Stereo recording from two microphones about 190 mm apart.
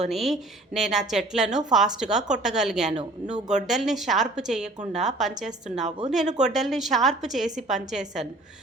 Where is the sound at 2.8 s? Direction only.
35° right (ahead or behind).